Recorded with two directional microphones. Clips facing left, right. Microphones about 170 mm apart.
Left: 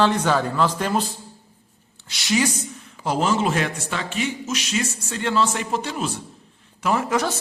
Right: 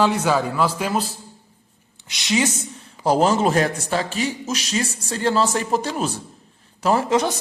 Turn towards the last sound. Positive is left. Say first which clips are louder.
# right 3 dB
turn(degrees=-15)  # may be behind; listen again after turning